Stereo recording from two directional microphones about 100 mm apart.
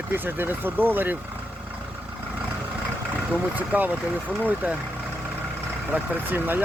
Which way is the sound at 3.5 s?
15° right (ahead or behind).